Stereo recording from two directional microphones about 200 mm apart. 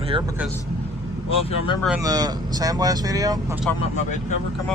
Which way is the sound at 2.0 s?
20° right (ahead or behind).